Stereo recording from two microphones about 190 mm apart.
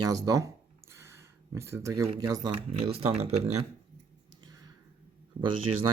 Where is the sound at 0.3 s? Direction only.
15° right (ahead or behind).